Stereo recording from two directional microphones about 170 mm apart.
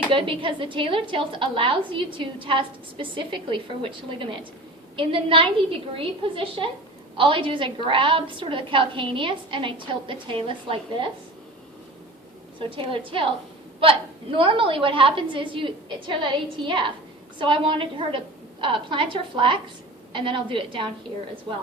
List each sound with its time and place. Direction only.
0.1 s a woman's voice: 30° right (ahead or behind)
12.5 s a woman's voice: 30° right (ahead or behind)